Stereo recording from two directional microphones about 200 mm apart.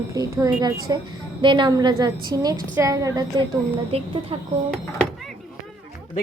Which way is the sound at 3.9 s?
30° right (ahead or behind).